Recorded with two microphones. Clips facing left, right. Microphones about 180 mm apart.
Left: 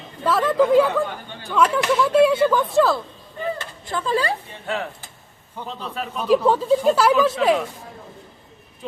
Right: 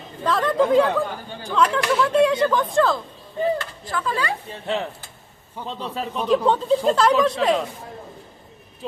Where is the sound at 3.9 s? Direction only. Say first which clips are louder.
Left 3 dB; 30° left (ahead or behind).